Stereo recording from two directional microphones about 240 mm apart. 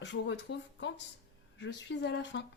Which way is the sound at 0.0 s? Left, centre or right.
Left.